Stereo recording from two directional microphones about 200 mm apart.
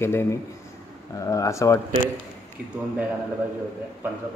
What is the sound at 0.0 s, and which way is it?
Speech, 10° left (ahead or behind).